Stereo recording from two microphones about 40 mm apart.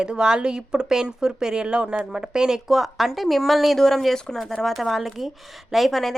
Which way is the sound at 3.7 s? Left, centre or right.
Centre.